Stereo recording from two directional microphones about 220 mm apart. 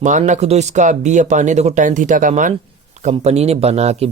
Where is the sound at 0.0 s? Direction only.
35° right (ahead or behind).